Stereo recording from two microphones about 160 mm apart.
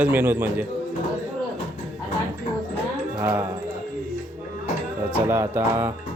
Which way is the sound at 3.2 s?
15° right (ahead or behind).